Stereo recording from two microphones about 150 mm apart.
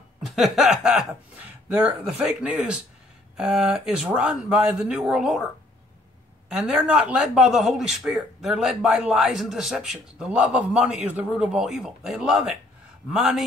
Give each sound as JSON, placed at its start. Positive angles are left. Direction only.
{"t": 0.2, "sound": "a man's voice", "side_deg": 0}
{"t": 6.6, "sound": "a man's voice", "side_deg": -5}